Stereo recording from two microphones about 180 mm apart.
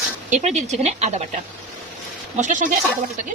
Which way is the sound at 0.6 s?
40° right (ahead or behind).